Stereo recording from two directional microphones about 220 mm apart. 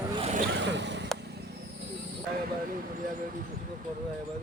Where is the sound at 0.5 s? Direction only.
55° right (ahead or behind).